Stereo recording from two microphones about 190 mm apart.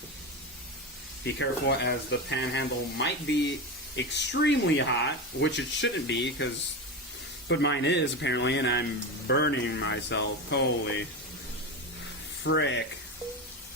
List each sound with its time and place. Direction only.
1.2 s speech: 65° left (ahead or behind)
12.4 s speech: 70° left (ahead or behind)